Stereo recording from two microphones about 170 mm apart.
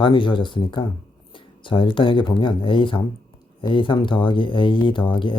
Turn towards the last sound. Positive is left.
turn(degrees=30)  # may be behind; listen again after turning